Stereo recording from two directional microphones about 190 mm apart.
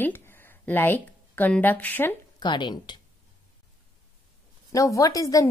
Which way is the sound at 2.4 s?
25° left (ahead or behind).